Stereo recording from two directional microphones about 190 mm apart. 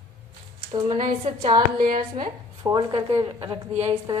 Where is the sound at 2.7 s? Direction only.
30° right (ahead or behind).